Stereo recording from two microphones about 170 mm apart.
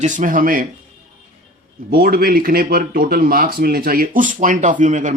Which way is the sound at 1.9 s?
60° right (ahead or behind).